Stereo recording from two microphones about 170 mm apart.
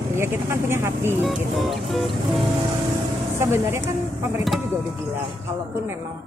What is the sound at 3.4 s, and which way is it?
Speech, 15° right (ahead or behind).